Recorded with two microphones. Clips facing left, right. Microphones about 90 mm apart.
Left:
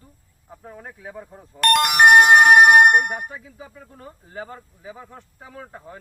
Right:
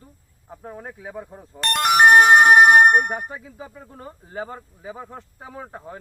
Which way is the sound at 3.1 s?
25° right (ahead or behind).